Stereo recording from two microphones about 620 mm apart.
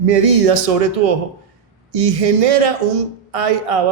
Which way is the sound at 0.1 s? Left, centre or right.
Right.